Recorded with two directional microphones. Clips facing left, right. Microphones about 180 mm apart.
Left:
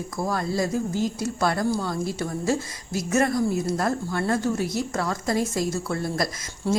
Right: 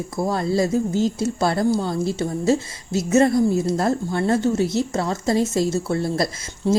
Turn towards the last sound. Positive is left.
turn(degrees=-20)  # may be behind; listen again after turning